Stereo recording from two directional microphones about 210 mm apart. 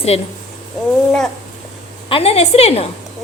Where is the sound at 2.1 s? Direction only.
30° left (ahead or behind).